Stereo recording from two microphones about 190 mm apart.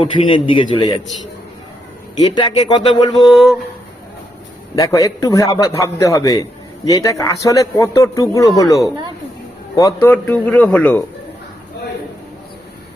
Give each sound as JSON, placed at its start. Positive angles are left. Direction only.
{"t": 0.0, "sound": "speech", "side_deg": 30}
{"t": 2.1, "sound": "speech", "side_deg": 25}
{"t": 3.2, "sound": "speech", "side_deg": 0}
{"t": 4.7, "sound": "a man's voice", "side_deg": 15}